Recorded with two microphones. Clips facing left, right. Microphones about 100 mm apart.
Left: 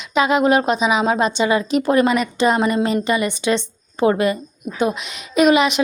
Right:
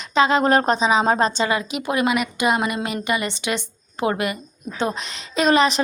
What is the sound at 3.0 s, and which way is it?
A woman's voice, 20° right (ahead or behind).